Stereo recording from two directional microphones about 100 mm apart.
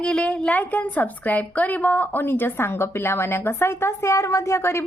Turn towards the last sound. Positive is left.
turn(degrees=25)  # may be behind; listen again after turning